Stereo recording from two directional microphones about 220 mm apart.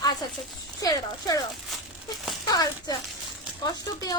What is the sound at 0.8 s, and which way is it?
Speech, 15° left (ahead or behind).